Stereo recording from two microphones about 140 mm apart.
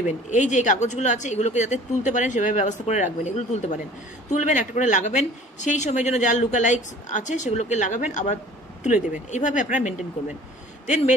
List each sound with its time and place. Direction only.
0.3 s a woman's voice: 60° left (ahead or behind)